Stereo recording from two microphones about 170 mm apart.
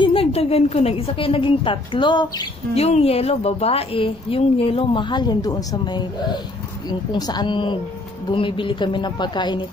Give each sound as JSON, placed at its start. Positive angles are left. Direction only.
{"t": 0.0, "sound": "a woman's voice", "side_deg": 35}